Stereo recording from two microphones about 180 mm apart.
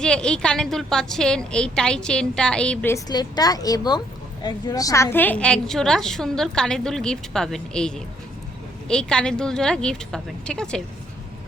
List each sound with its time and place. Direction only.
0.0 s a woman's voice: 5° left (ahead or behind)
2.9 s a woman's voice: 20° left (ahead or behind); by 10.8 s 5° left (ahead or behind)